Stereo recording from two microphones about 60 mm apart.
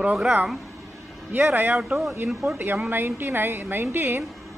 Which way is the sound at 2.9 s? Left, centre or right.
Right.